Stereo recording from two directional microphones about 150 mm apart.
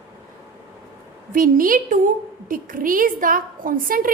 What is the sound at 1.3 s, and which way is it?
A woman's voice, 65° right (ahead or behind).